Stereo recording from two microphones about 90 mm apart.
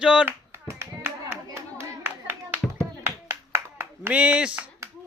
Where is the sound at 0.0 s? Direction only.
10° right (ahead or behind).